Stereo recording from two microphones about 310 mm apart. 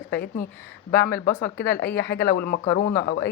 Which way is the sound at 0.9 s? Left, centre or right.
Left.